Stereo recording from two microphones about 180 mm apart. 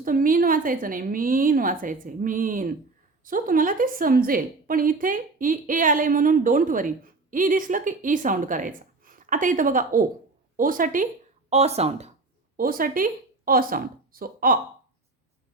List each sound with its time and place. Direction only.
0.0 s a woman's voice: 50° right (ahead or behind)
12.5 s speech: 50° right (ahead or behind)